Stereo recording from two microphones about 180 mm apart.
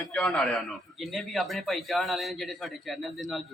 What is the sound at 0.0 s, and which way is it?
A man's voice, centre (ahead or behind).